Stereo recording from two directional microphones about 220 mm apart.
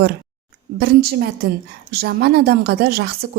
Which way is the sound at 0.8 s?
45° right (ahead or behind).